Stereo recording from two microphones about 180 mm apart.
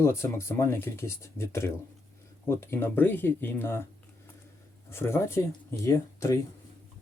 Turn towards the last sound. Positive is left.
turn(degrees=15)  # may be behind; listen again after turning